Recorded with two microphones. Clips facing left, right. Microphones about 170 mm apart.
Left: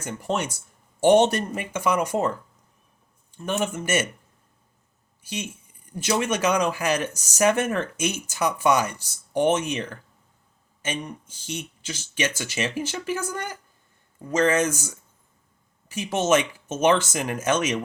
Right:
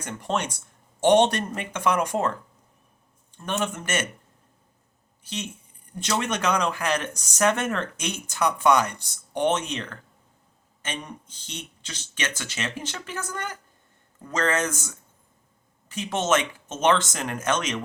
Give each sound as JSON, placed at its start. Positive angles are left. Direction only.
{"t": 0.0, "sound": "speech", "side_deg": 5}
{"t": 3.3, "sound": "speech", "side_deg": 10}
{"t": 5.2, "sound": "speech", "side_deg": 10}
{"t": 15.9, "sound": "speech", "side_deg": 10}